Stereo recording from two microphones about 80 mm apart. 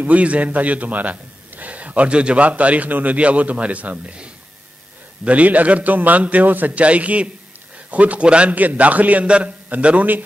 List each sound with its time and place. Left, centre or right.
0.0 s a man's voice: centre